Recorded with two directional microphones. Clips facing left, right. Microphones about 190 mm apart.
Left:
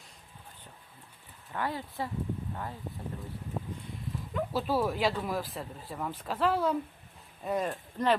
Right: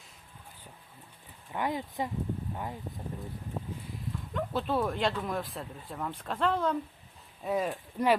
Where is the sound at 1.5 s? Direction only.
15° right (ahead or behind).